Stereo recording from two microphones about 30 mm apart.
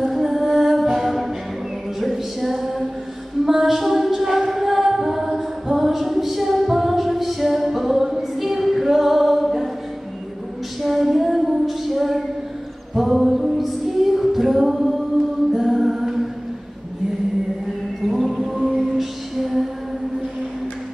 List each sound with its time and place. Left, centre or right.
0.1 s music: centre
0.8 s a capella: centre
2.0 s female singing: centre
3.4 s a capella: centre
10.8 s female singing: centre
12.9 s music: centre
18.0 s music: centre
18.6 s whale vocalization: centre
18.9 s music: centre